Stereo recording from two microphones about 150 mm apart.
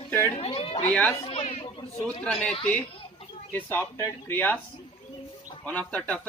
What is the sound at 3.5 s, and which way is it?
Speech, 10° left (ahead or behind).